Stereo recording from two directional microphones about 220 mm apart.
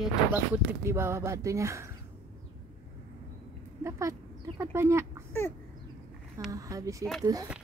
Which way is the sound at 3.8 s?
15° right (ahead or behind).